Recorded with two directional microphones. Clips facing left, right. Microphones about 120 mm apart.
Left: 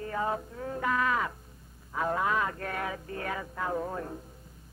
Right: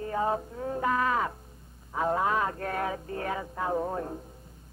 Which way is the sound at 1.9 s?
25° right (ahead or behind).